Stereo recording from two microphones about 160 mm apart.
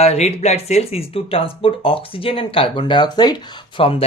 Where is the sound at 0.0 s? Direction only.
40° left (ahead or behind).